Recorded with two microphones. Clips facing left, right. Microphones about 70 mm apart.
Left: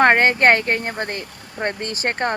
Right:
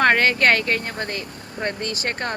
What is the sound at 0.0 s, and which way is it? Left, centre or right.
Speech, left.